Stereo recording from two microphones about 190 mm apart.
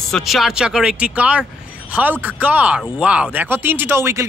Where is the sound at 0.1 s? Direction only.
Centre (ahead or behind).